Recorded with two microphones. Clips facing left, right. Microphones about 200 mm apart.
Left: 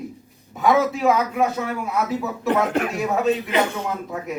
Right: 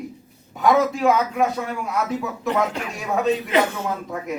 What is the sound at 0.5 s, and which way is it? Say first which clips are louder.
Speech: even; centre (ahead or behind).